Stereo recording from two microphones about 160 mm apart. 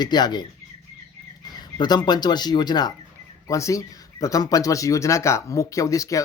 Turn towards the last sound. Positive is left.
turn(degrees=20)  # may be behind; listen again after turning